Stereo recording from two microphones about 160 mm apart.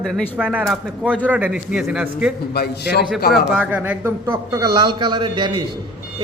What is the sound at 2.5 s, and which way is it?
Speech, 80° left.